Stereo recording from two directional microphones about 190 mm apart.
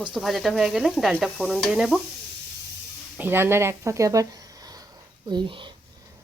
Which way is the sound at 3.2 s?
10° right (ahead or behind).